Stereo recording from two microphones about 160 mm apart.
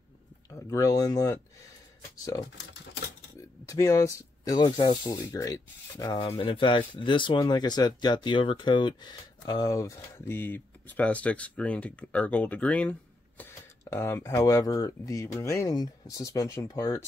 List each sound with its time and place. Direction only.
0.5 s speech: 20° left (ahead or behind)
3.3 s speech: 20° left (ahead or behind)